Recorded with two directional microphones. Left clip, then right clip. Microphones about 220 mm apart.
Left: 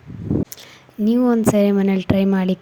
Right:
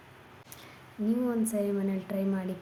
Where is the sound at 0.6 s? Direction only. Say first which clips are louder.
Left 12 dB; 35° left (ahead or behind).